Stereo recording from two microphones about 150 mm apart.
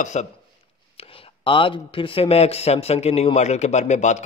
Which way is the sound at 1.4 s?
35° left (ahead or behind).